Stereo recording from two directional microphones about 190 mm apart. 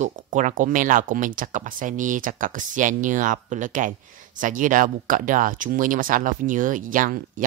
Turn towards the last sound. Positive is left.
turn(degrees=-45)  # may be behind; listen again after turning